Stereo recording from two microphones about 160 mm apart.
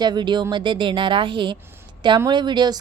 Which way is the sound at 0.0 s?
30° right (ahead or behind).